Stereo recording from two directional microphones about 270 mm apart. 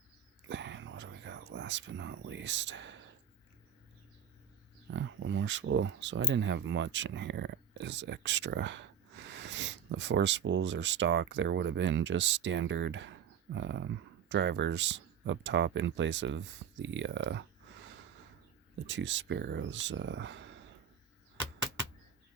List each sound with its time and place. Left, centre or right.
0.4 s a sound: right
4.9 s speech: right
18.9 s speech: right